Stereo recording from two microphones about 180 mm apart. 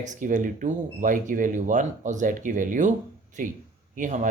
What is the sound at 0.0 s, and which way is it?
Speech, 45° right (ahead or behind).